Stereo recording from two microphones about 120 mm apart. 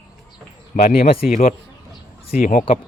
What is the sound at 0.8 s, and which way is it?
Speech, 65° left (ahead or behind).